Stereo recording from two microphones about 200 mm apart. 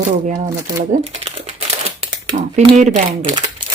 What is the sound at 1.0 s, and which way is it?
Crumpling, 30° right (ahead or behind).